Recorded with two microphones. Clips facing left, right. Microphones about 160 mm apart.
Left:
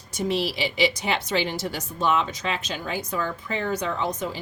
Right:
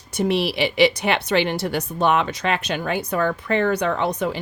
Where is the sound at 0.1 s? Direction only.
65° right (ahead or behind).